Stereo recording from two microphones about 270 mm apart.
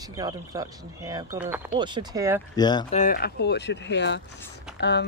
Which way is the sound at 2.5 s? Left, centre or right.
Centre.